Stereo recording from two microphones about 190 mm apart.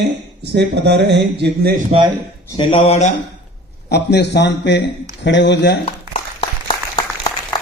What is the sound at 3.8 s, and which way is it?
A man's voice, 60° left (ahead or behind).